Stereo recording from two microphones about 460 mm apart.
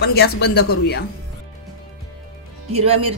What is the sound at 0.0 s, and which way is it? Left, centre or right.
Speech, left.